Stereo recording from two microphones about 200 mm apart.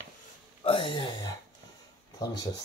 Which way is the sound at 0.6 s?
25° left (ahead or behind).